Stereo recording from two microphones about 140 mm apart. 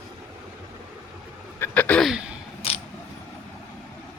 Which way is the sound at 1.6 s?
10° left (ahead or behind).